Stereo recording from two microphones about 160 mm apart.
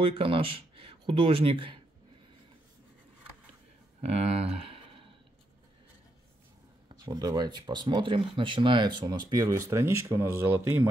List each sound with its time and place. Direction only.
0.0 s speech: 35° right (ahead or behind)
4.0 s speech: 40° right (ahead or behind)
7.1 s speech: 25° right (ahead or behind)